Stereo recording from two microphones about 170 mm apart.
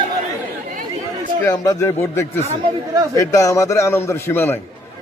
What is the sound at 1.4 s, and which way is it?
A man's voice, 15° left (ahead or behind).